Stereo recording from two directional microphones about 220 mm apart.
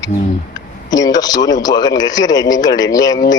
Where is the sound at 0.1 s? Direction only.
30° left (ahead or behind).